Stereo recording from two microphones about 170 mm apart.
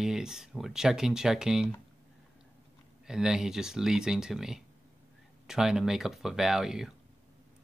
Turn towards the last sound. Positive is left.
turn(degrees=-5)  # may be behind; listen again after turning